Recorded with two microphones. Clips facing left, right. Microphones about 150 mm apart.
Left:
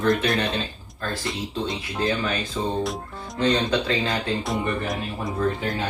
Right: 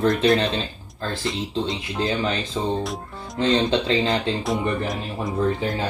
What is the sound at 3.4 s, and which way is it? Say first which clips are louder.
Speech: right 2 dB; 25° right (ahead or behind).